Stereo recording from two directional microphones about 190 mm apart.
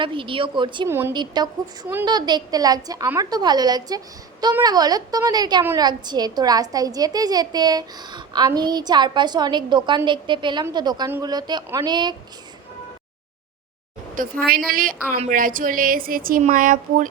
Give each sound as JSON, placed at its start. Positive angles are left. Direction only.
{"t": 0.0, "sound": "a woman's voice", "side_deg": -25}
{"t": 0.9, "sound": "a woman's voice", "side_deg": -10}
{"t": 14.2, "sound": "speech", "side_deg": -50}